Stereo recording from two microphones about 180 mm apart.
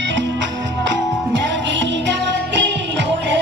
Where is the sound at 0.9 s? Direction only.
85° right.